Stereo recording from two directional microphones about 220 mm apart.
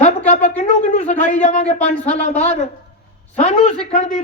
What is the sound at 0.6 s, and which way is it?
Speech, 30° left (ahead or behind).